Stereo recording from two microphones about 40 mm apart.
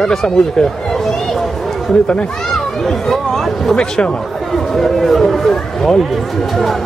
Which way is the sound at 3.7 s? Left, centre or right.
Left.